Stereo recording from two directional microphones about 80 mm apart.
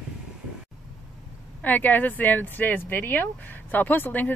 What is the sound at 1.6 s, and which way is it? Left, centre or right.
Speech, left.